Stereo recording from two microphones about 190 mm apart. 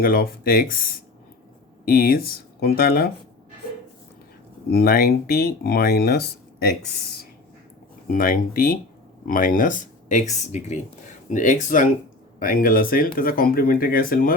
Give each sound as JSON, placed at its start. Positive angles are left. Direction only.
{"t": 0.0, "sound": "speech", "side_deg": 50}
{"t": 4.7, "sound": "speech", "side_deg": 50}
{"t": 8.0, "sound": "speech", "side_deg": 45}